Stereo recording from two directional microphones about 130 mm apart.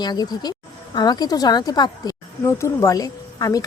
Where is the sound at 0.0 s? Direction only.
30° left (ahead or behind).